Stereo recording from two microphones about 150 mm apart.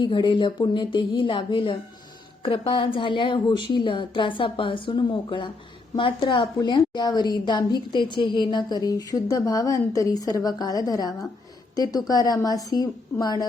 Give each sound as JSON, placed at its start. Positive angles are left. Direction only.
{"t": 0.0, "sound": "a woman's voice", "side_deg": 35}